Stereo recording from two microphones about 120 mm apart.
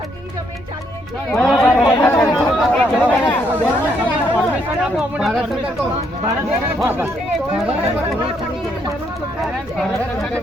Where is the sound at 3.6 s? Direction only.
10° left (ahead or behind).